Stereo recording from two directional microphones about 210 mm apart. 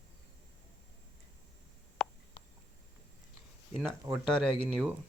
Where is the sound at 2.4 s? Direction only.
25° left (ahead or behind).